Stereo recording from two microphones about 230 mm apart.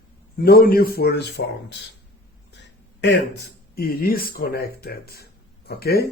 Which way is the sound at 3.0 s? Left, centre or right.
Left.